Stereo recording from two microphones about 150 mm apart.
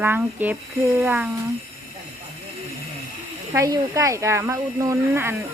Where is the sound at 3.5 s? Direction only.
20° right (ahead or behind).